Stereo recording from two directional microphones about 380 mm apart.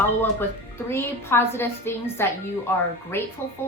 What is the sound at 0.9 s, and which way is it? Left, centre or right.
A woman's voice, centre.